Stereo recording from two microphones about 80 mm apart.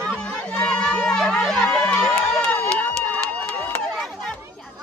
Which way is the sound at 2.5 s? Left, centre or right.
Centre.